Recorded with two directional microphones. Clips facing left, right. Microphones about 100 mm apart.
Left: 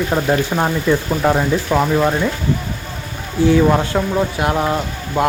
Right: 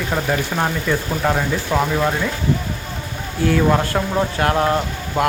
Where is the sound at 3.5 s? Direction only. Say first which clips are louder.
Left 2 dB; 10° left (ahead or behind).